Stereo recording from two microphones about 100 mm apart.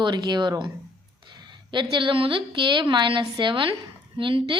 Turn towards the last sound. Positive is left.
turn(degrees=-60)  # may be behind; listen again after turning